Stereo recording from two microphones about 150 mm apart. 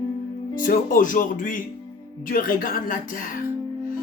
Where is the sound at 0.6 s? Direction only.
65° left (ahead or behind).